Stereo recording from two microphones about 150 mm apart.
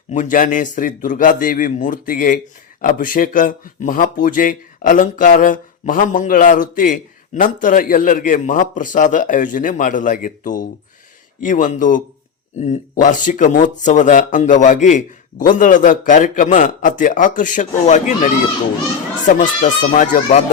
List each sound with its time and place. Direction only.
0.1 s speech: 60° left (ahead or behind)
19.3 s speech: 55° left (ahead or behind)